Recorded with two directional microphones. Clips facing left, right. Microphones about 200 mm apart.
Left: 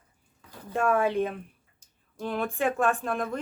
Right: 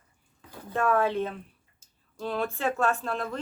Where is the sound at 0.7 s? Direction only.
10° left (ahead or behind).